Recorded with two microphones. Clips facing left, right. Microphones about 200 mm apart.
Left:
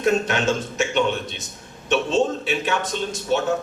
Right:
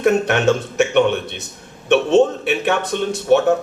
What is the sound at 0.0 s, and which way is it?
A man's voice, 65° right (ahead or behind).